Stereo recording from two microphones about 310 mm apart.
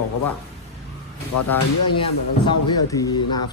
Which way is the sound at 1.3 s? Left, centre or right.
Left.